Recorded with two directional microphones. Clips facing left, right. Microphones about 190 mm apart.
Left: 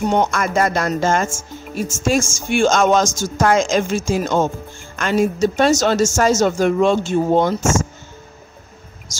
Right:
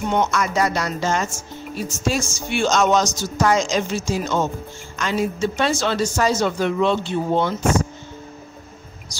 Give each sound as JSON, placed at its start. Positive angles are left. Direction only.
{"t": 0.0, "sound": "speech", "side_deg": 50}